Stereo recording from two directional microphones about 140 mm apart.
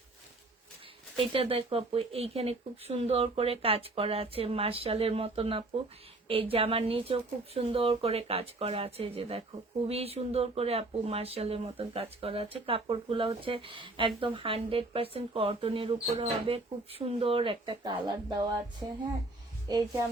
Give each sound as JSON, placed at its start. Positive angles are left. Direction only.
{"t": 1.1, "sound": "speech", "side_deg": -40}
{"t": 19.6, "sound": "a woman's voice", "side_deg": -25}